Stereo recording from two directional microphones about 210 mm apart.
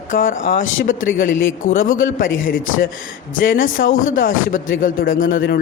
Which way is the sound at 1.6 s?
40° left (ahead or behind).